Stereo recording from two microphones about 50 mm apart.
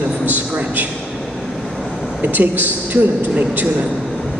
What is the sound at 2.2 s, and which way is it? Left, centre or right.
A man's voice, right.